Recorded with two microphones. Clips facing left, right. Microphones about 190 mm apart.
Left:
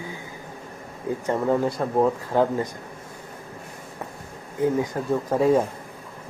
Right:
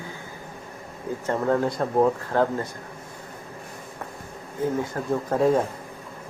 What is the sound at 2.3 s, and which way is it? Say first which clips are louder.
Speech: left 2 dB; 15° left (ahead or behind).